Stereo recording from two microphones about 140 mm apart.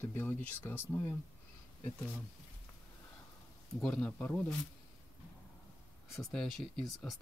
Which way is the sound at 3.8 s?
10° left (ahead or behind).